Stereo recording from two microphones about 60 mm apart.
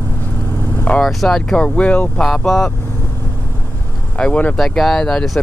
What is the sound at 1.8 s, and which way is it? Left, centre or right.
Speech, left.